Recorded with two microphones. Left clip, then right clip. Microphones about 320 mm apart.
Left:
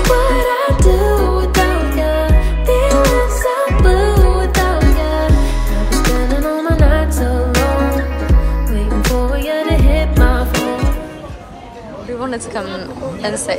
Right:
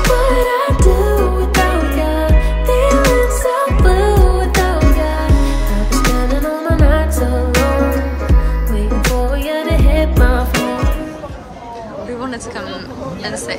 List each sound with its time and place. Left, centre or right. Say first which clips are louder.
0.0 s music: even; centre
12.2 s chatter: left 3 dB; centre
13.2 s a sound: left 4 dB; centre